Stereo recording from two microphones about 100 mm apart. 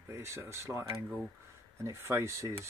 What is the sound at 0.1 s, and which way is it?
Speech, 25° right (ahead or behind).